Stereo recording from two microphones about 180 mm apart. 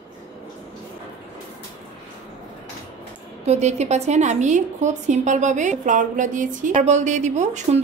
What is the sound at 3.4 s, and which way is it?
A woman's voice, 40° right (ahead or behind).